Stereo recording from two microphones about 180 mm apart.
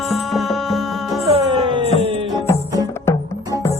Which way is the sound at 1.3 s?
30° right (ahead or behind).